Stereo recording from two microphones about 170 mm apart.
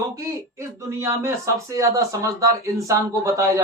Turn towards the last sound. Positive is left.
turn(degrees=-20)  # may be behind; listen again after turning